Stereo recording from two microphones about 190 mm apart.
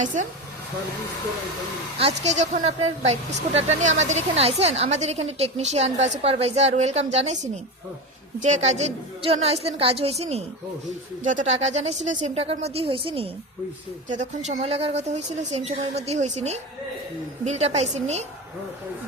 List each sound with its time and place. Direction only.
0.0 s a woman's voice: 40° right (ahead or behind)
2.0 s a woman's voice: 35° right (ahead or behind)
14.1 s a woman's voice: 40° right (ahead or behind)